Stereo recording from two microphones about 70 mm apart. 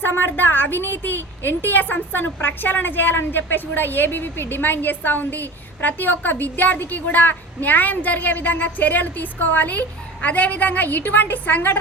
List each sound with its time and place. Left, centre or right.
0.0 s a woman's voice: left